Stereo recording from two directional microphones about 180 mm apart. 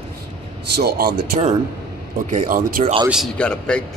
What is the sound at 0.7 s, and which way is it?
Speech, 60° right (ahead or behind).